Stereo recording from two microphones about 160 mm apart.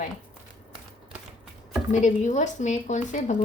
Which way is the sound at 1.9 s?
50° left (ahead or behind).